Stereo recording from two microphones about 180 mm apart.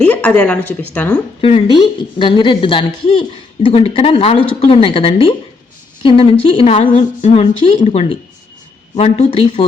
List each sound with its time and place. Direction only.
0.0 s speech: 10° left (ahead or behind)
1.4 s a woman's voice: 30° left (ahead or behind)